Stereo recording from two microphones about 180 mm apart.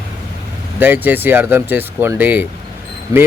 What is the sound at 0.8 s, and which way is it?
A man's voice, 10° right (ahead or behind).